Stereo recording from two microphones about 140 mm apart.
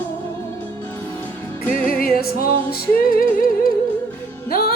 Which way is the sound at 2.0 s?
90° left.